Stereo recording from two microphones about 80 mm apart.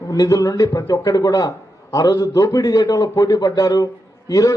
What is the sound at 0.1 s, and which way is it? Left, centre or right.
A man's voice, left.